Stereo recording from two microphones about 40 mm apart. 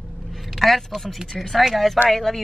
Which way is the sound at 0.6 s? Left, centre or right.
Centre.